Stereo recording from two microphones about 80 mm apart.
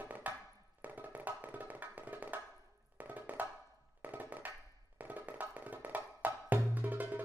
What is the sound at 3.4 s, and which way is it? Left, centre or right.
Wood block, right.